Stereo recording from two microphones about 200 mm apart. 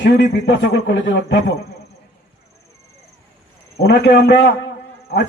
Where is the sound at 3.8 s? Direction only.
60° left (ahead or behind).